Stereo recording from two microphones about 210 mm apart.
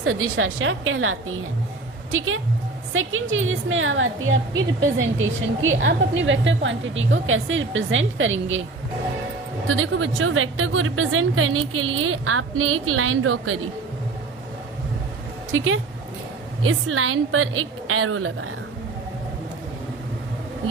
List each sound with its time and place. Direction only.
0.0 s a woman's voice: 75° right (ahead or behind)
9.6 s a woman's voice: 70° right (ahead or behind)
15.5 s a woman's voice: 75° right (ahead or behind)
16.6 s a woman's voice: 85° right